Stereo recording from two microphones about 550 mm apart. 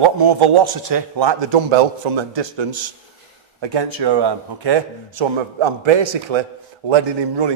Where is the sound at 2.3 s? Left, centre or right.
Right.